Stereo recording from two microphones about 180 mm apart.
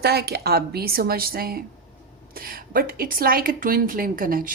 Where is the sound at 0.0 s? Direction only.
65° right (ahead or behind).